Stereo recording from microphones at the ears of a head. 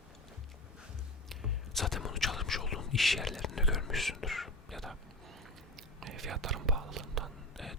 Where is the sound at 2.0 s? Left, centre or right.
Left.